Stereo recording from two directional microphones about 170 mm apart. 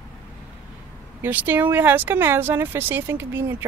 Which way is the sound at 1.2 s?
10° right (ahead or behind).